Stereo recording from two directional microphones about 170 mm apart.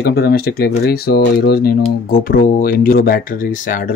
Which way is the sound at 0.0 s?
65° left (ahead or behind).